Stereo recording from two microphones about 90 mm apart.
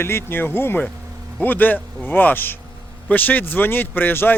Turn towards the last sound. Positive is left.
turn(degrees=20)  # may be behind; listen again after turning